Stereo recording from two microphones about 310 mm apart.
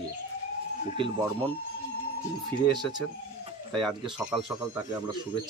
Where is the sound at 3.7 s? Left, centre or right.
Centre.